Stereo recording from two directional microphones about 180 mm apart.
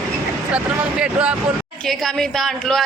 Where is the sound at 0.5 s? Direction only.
5° right (ahead or behind).